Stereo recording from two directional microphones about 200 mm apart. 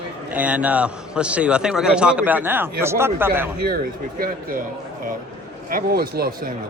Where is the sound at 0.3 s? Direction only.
5° right (ahead or behind).